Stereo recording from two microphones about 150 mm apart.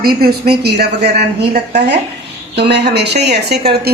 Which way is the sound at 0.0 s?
90° right.